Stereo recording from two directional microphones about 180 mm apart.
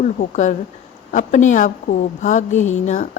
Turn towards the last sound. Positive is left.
turn(degrees=40)  # may be behind; listen again after turning